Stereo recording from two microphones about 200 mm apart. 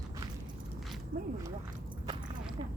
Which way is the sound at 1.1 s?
45° right (ahead or behind).